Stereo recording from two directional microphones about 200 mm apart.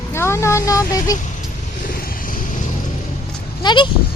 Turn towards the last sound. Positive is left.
turn(degrees=25)  # may be behind; listen again after turning